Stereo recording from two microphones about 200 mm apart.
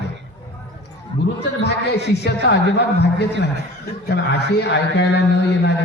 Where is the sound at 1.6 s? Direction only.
55° left (ahead or behind).